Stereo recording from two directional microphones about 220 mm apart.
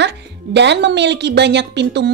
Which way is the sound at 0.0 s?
50° right (ahead or behind).